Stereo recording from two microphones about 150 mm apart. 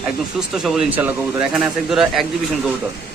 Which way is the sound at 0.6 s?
5° right (ahead or behind).